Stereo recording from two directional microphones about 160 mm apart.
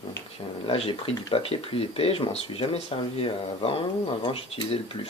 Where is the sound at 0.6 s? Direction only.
35° left (ahead or behind).